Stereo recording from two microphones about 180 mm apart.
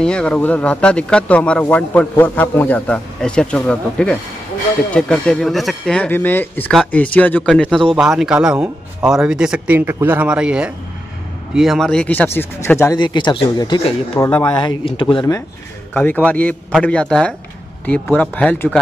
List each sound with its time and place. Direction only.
0.0 s speech: 5° left (ahead or behind); by 14.2 s 30° left (ahead or behind)
14.2 s speech: 10° left (ahead or behind)
14.5 s speech: 25° left (ahead or behind)
15.9 s speech: 10° left (ahead or behind)